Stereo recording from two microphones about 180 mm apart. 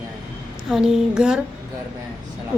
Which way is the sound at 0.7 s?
5° right (ahead or behind).